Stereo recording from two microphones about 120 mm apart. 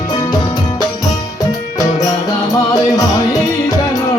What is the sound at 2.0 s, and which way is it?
Music, 30° left (ahead or behind).